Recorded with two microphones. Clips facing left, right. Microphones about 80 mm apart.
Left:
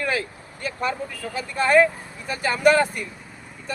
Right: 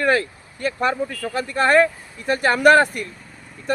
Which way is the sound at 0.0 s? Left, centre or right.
Right.